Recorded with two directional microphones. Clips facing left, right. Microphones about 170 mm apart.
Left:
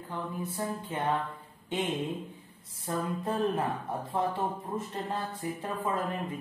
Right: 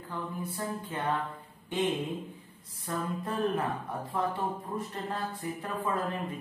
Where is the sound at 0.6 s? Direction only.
25° left (ahead or behind).